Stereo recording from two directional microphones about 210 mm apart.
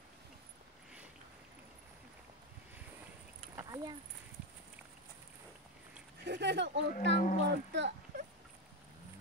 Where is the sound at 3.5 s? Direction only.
15° right (ahead or behind).